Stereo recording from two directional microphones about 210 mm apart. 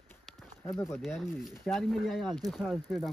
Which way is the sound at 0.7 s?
10° left (ahead or behind).